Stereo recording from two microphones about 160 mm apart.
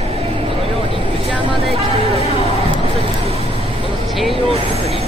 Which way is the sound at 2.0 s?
40° left (ahead or behind).